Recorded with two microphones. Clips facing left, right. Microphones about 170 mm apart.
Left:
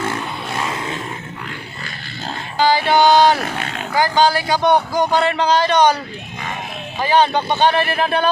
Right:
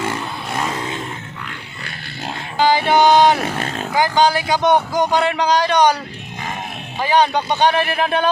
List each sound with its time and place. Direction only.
2.6 s music: 20° right (ahead or behind)
3.6 s roaring cats: 40° right (ahead or behind)
3.9 s a man's voice: 20° right (ahead or behind)
7.0 s a man's voice: 15° right (ahead or behind)